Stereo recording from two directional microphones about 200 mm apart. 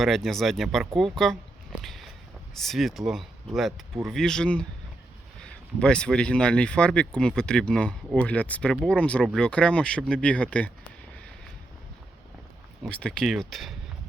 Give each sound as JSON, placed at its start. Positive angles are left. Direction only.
{"t": 0.0, "sound": "speech", "side_deg": 0}
{"t": 1.8, "sound": "a sound", "side_deg": 0}
{"t": 2.6, "sound": "speech", "side_deg": 0}
{"t": 12.8, "sound": "speech", "side_deg": 5}